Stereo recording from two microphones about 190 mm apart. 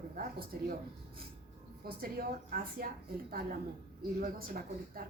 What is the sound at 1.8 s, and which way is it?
Speech, 50° right (ahead or behind).